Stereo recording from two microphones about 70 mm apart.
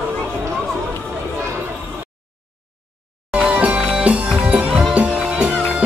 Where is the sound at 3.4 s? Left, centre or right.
Centre.